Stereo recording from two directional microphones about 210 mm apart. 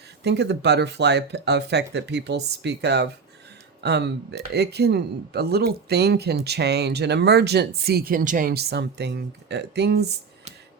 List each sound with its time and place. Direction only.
0.2 s speech: 55° right (ahead or behind)